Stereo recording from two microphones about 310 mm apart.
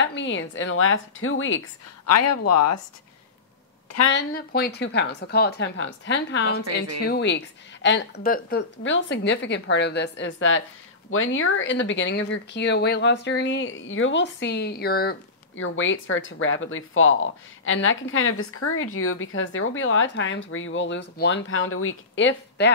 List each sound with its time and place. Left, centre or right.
0.0 s speech: left
4.1 s speech: left